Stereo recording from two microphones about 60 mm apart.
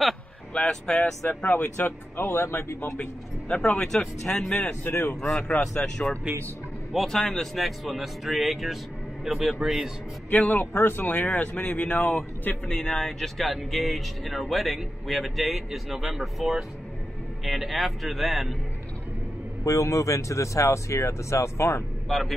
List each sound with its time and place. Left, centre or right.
0.5 s speech: centre
1.6 s speech: left
3.0 s speech: left
4.8 s speech: left
5.8 s a man's voice: centre
7.2 s speech: centre
7.5 s speech: centre
10.3 s speech: left
10.7 s speech: left
11.3 s speech: left; by 18.6 s centre
19.6 s speech: left
22.1 s speech: centre